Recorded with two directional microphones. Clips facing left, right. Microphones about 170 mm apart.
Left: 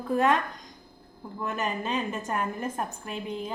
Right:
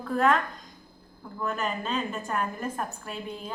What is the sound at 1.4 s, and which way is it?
A woman's voice, 20° left (ahead or behind).